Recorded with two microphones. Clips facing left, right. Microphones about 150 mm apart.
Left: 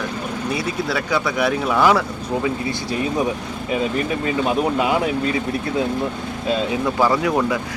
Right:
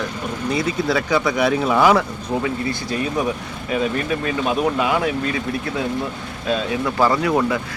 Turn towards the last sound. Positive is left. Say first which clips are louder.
# even
turn(degrees=10)  # may be behind; listen again after turning